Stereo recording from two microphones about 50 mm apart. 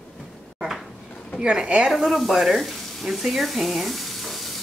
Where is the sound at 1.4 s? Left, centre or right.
Centre.